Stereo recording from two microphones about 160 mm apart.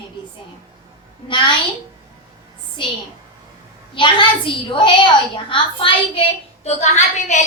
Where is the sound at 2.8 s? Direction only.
30° left (ahead or behind).